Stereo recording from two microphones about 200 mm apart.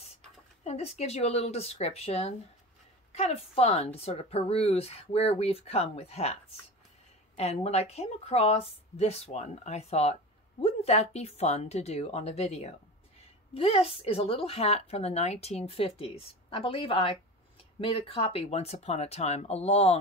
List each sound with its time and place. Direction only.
0.7 s a woman's voice: 30° left (ahead or behind)
7.3 s a woman's voice: 30° left (ahead or behind)